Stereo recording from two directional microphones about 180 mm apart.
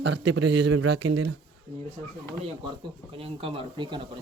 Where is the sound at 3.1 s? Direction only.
30° right (ahead or behind).